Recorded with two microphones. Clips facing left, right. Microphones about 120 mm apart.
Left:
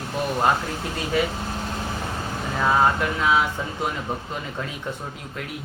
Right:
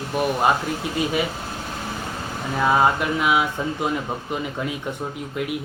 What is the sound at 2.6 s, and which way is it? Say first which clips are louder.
Speech: right 1 dB; 15° right (ahead or behind).